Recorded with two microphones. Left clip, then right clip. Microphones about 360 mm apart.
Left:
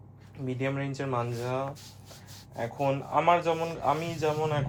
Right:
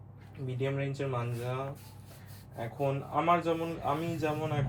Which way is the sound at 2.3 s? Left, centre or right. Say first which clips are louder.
Left 4 dB; left.